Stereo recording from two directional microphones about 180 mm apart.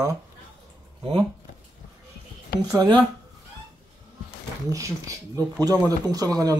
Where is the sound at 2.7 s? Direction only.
20° right (ahead or behind).